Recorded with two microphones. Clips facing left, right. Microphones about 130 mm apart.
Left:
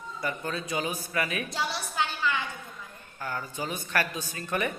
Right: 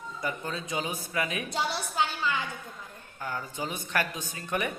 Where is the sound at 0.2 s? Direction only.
20° right (ahead or behind).